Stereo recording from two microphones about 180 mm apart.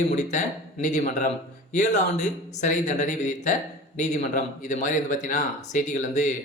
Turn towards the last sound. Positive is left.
turn(degrees=45)  # may be behind; listen again after turning